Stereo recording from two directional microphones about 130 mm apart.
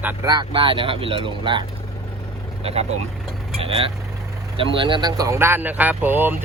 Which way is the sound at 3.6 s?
50° right (ahead or behind).